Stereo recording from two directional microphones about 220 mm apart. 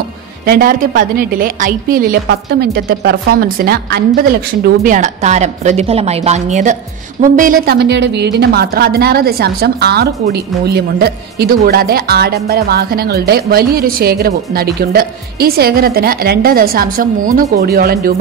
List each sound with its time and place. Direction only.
0.5 s a woman's voice: 40° right (ahead or behind)